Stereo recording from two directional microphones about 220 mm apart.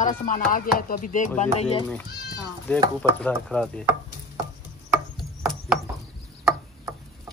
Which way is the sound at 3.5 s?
5° left (ahead or behind).